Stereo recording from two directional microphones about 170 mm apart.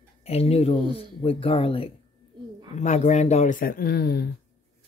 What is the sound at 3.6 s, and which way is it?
Speech, 60° left (ahead or behind).